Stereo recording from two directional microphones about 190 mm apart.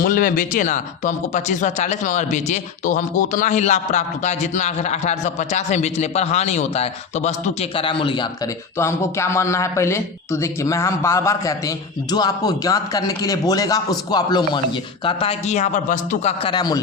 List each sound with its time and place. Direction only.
0.0 s speech: 45° left (ahead or behind); by 8.3 s 25° left (ahead or behind)
8.8 s a man's voice: 15° left (ahead or behind)